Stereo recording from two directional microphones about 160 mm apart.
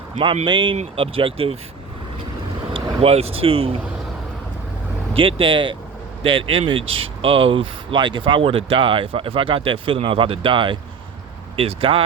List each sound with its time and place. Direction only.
0.4 s speech: 30° right (ahead or behind)
2.7 s speech: 35° right (ahead or behind)
5.1 s speech: 35° right (ahead or behind)